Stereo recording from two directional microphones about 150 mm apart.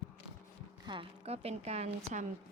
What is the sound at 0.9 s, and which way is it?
Speech, 40° right (ahead or behind).